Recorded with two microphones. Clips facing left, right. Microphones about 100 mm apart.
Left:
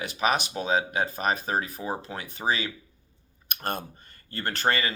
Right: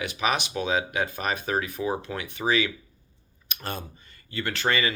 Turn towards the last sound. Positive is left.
turn(degrees=45)  # may be behind; listen again after turning